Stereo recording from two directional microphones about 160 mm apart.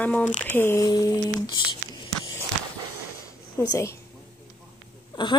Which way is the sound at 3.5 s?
15° left (ahead or behind).